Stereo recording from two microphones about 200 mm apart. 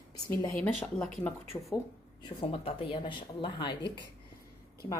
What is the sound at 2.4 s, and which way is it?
Speech, 25° left (ahead or behind).